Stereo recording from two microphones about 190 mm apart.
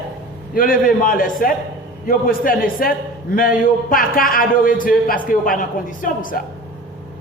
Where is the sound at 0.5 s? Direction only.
50° left (ahead or behind).